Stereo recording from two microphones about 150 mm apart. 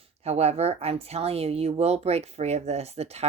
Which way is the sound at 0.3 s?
45° right (ahead or behind).